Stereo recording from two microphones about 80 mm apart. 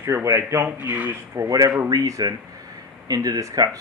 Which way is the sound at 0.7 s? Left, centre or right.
Right.